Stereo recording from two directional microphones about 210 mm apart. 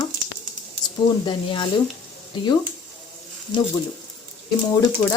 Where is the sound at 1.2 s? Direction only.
20° left (ahead or behind).